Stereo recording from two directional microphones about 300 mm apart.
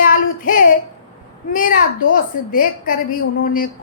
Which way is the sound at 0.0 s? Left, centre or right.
Left.